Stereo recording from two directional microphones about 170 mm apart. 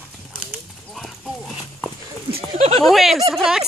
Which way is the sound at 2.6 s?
40° right (ahead or behind).